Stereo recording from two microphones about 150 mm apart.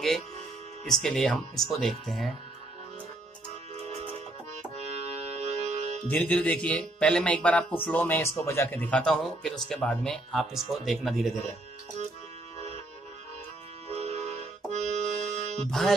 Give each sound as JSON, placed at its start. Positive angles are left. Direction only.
{"t": 0.8, "sound": "speech", "side_deg": 5}
{"t": 5.2, "sound": "music", "side_deg": -45}
{"t": 6.0, "sound": "speech", "side_deg": 10}
{"t": 13.8, "sound": "music", "side_deg": -45}